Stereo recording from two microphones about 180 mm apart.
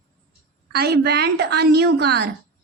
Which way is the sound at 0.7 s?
60° right (ahead or behind).